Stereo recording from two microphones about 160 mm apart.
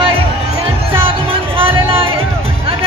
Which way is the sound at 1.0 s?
35° right (ahead or behind).